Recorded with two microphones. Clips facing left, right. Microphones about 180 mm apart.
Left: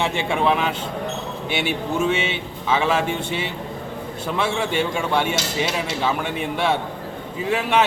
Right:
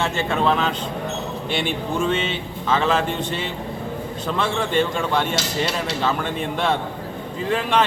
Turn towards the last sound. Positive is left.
turn(degrees=10)  # may be behind; listen again after turning